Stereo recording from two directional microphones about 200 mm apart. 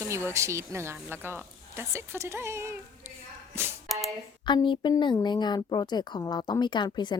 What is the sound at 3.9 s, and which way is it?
Speech, centre (ahead or behind).